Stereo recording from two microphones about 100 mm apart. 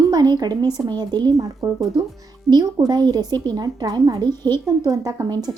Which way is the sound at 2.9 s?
45° right (ahead or behind).